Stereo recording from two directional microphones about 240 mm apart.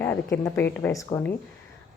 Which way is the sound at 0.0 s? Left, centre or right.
Centre.